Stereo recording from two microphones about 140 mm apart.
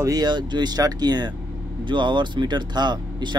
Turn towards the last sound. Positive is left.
turn(degrees=-30)  # may be behind; listen again after turning